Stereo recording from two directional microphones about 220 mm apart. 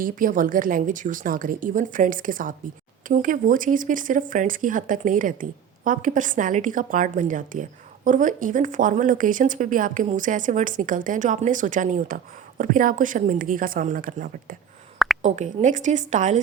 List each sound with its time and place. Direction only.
0.0 s speech: 40° right (ahead or behind)
14.9 s a sound: centre (ahead or behind)
15.2 s speech: 35° right (ahead or behind)